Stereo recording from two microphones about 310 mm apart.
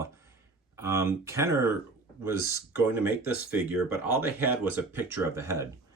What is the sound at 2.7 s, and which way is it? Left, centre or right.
Speech, centre.